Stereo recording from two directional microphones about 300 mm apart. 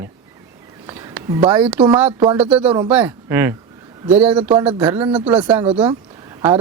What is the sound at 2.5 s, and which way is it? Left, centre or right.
Speech, centre.